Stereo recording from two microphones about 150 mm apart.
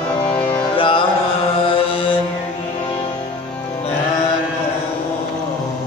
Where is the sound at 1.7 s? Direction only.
35° left (ahead or behind).